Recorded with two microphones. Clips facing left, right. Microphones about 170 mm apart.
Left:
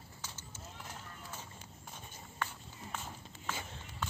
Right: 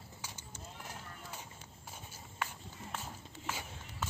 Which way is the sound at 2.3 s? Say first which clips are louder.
Even; 5° right (ahead or behind).